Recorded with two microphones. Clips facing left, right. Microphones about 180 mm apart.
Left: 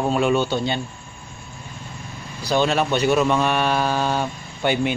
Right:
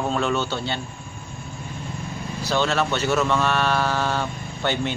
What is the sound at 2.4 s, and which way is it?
A man's voice, 15° left (ahead or behind).